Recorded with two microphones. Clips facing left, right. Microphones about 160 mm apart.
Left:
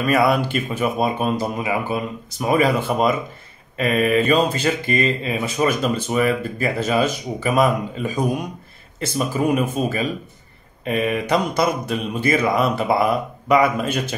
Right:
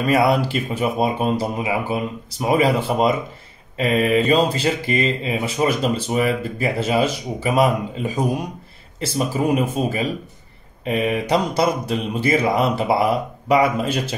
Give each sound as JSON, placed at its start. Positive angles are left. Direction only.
{"t": 0.0, "sound": "speech", "side_deg": -25}